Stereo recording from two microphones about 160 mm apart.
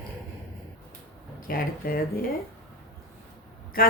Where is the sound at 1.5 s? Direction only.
65° left (ahead or behind).